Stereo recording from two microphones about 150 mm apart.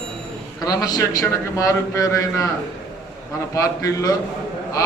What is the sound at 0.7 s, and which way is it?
Speech, 25° left (ahead or behind).